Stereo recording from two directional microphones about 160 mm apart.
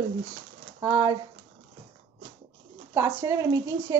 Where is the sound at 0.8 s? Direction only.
25° right (ahead or behind).